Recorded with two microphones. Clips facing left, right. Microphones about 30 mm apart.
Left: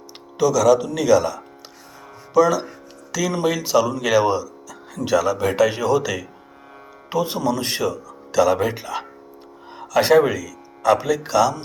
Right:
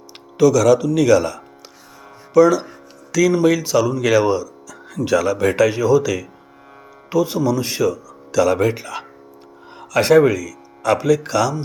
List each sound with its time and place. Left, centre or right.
0.3 s speech: centre
5.5 s speech: centre
8.4 s speech: centre